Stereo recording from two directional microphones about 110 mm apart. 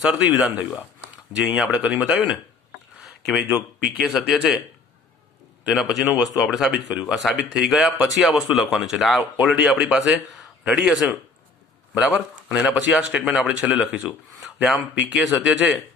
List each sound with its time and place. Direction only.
0.0 s speech: 10° right (ahead or behind)
3.5 s speech: 20° right (ahead or behind)
4.0 s speech: centre (ahead or behind)
5.7 s speech: centre (ahead or behind)
12.5 s speech: 10° right (ahead or behind)